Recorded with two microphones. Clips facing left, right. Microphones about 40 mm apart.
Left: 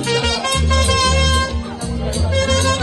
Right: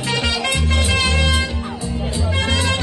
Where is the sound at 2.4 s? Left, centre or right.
Right.